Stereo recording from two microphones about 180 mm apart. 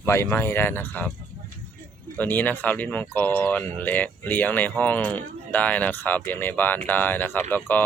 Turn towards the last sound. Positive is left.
turn(degrees=10)  # may be behind; listen again after turning